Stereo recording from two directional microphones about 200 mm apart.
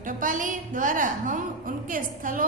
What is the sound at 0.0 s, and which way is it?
A woman's voice, 40° right (ahead or behind).